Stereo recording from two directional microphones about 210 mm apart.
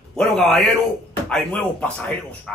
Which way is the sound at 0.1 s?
Centre (ahead or behind).